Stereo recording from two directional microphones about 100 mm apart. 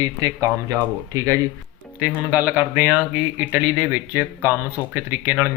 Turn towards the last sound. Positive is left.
turn(degrees=-20)  # may be behind; listen again after turning